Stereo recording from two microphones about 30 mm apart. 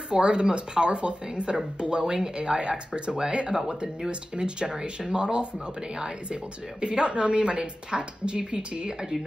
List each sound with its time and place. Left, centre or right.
0.1 s a woman's voice: right
6.8 s a woman's voice: right